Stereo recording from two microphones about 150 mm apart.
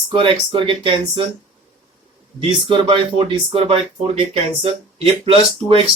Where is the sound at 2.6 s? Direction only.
35° right (ahead or behind).